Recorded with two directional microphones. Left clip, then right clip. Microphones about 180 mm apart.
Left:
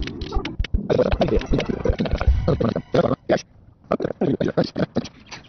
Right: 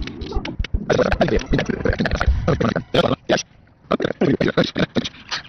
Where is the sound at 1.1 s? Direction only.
5° left (ahead or behind).